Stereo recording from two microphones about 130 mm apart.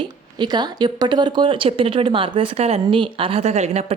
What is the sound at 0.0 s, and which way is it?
A woman's voice, 35° right (ahead or behind).